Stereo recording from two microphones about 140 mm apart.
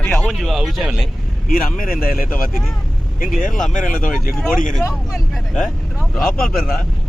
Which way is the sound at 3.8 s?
75° left (ahead or behind).